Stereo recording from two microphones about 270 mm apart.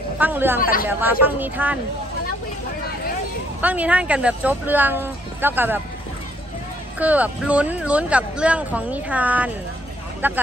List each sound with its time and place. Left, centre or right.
0.2 s speech: centre
0.6 s speech: left
1.4 s speech: centre
3.6 s speech: centre
7.0 s speech: centre